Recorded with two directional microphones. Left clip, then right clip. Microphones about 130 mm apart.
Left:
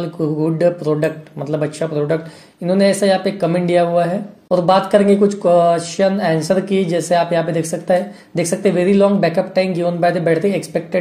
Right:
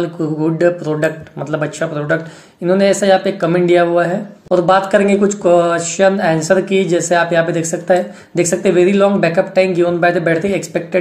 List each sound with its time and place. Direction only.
0.4 s speech: 40° left (ahead or behind)